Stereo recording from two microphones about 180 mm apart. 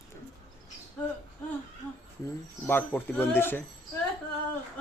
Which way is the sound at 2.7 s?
10° left (ahead or behind).